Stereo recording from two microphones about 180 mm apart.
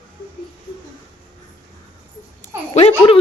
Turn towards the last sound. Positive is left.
turn(degrees=35)  # may be behind; listen again after turning